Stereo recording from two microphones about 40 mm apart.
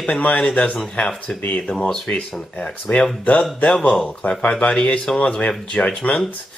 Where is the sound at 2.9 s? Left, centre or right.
Left.